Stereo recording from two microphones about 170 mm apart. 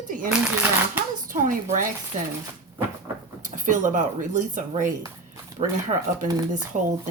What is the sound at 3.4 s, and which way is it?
Speech, 50° right (ahead or behind).